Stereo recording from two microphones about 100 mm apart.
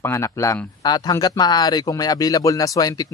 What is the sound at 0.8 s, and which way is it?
Speech, 40° left (ahead or behind).